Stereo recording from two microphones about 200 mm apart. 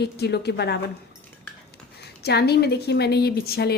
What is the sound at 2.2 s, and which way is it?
A woman's voice, 55° left (ahead or behind).